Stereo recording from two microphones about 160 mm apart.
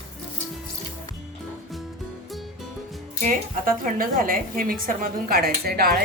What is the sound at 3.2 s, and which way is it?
A woman's voice, 60° right (ahead or behind).